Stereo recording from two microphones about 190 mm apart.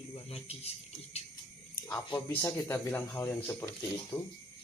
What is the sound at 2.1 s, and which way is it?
Speech, 20° left (ahead or behind).